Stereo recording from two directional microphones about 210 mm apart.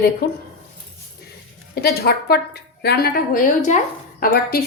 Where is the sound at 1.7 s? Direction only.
50° left (ahead or behind).